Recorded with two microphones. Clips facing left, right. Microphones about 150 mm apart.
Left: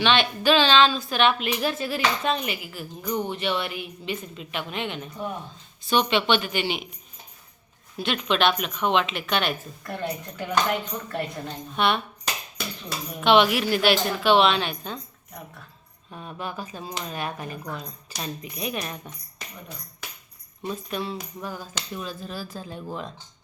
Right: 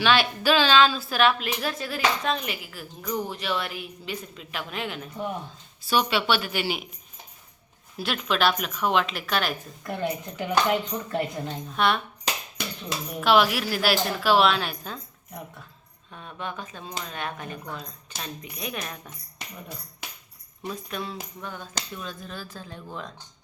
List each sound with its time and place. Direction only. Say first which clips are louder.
0.0 s a woman's voice: left 1 dB; 5° right (ahead or behind)
7.9 s a woman's voice: left 2 dB; centre (ahead or behind)
9.8 s speech: right 2 dB; 15° right (ahead or behind)
11.8 s a woman's voice: even; centre (ahead or behind)
13.1 s a woman's voice: left 2 dB; centre (ahead or behind)
16.1 s a woman's voice: left 2 dB; 5° left (ahead or behind)
20.7 s a woman's voice: left 3 dB; centre (ahead or behind)